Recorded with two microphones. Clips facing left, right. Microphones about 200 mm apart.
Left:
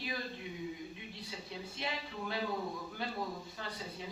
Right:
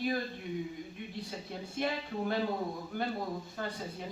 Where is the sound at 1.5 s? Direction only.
50° right (ahead or behind).